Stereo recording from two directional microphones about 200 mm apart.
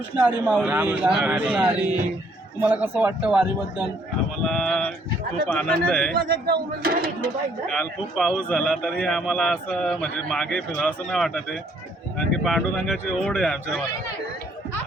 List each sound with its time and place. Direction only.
0.2 s a man's voice: 10° right (ahead or behind)
6.1 s speech: 50° right (ahead or behind)
7.7 s a man's voice: centre (ahead or behind)